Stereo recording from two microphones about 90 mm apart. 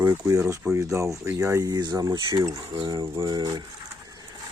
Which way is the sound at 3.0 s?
90° right.